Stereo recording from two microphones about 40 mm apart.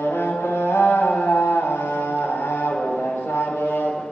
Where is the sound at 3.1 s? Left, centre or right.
Left.